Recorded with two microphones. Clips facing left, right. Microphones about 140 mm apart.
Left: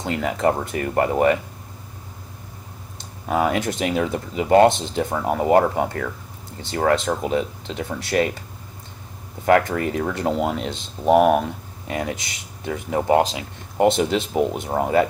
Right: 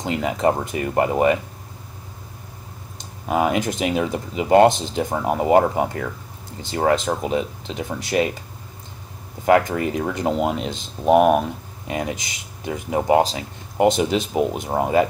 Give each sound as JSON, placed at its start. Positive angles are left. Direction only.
{"t": 0.0, "sound": "speech", "side_deg": -20}
{"t": 3.3, "sound": "speech", "side_deg": -20}
{"t": 9.5, "sound": "speech", "side_deg": -20}